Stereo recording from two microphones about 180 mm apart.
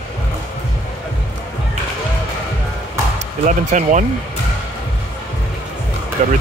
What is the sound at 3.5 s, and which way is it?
Speech, 45° right (ahead or behind).